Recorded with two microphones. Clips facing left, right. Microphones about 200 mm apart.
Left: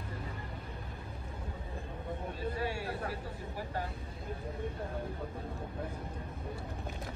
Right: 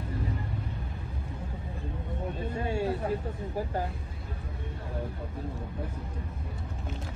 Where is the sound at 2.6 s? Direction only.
25° right (ahead or behind).